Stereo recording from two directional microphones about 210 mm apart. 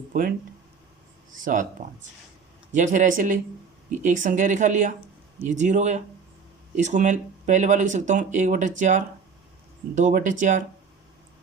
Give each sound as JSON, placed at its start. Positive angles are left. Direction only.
{"t": 0.1, "sound": "speech", "side_deg": -40}
{"t": 1.8, "sound": "speech", "side_deg": -40}